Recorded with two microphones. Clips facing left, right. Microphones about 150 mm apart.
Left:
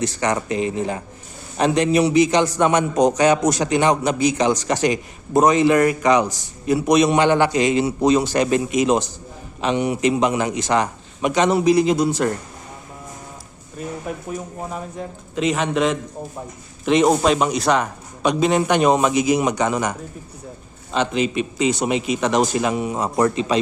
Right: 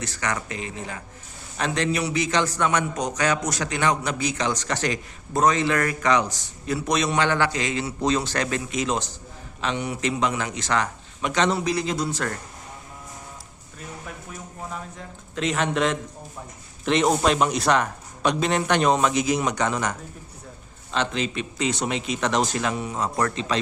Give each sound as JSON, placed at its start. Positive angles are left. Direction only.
{"t": 0.0, "sound": "a man's voice", "side_deg": 20}
{"t": 14.7, "sound": "a man's voice", "side_deg": 15}
{"t": 15.4, "sound": "a man's voice", "side_deg": 0}